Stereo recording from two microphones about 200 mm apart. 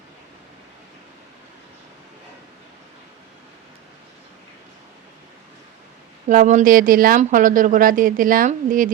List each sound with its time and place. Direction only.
6.2 s speech: 40° right (ahead or behind)